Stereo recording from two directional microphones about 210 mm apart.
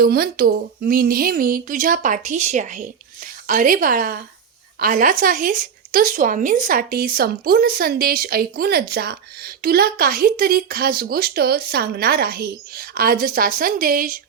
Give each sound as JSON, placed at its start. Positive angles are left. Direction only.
{"t": 0.0, "sound": "a woman's voice", "side_deg": -45}